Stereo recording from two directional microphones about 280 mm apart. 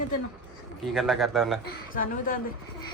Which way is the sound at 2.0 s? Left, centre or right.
Left.